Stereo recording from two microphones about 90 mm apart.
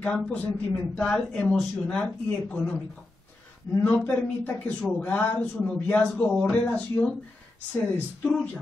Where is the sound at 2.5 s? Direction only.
20° left (ahead or behind).